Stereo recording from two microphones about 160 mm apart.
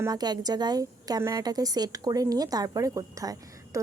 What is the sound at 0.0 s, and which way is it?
A woman's voice, 25° right (ahead or behind).